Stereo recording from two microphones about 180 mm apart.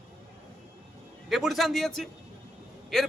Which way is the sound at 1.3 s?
Centre (ahead or behind).